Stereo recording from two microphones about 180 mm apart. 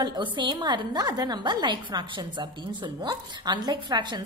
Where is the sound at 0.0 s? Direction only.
25° right (ahead or behind).